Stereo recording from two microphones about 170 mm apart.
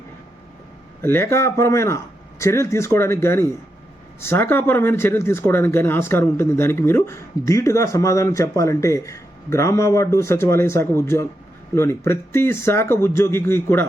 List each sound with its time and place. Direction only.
1.0 s speech: 15° left (ahead or behind)